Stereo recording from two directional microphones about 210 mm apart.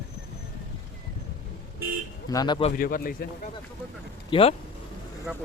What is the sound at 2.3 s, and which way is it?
Speech, 20° left (ahead or behind).